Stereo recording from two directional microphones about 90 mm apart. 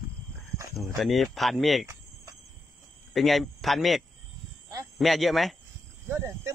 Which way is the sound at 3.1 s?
Centre (ahead or behind).